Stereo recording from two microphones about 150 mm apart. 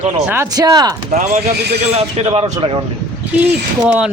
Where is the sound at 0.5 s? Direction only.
25° right (ahead or behind).